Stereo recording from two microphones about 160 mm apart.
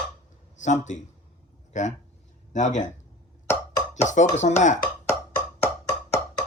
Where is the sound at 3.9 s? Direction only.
50° left (ahead or behind).